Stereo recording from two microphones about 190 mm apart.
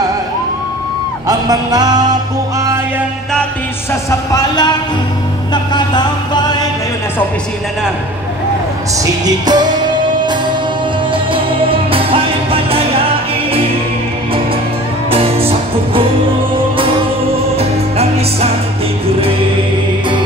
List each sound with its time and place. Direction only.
1.2 s music: 20° right (ahead or behind)
4.3 s speech: 20° left (ahead or behind)
5.5 s music: 20° left (ahead or behind)
9.0 s music: 20° right (ahead or behind)
11.3 s music: 30° right (ahead or behind)
15.0 s music: 30° right (ahead or behind)
17.6 s music: 30° right (ahead or behind)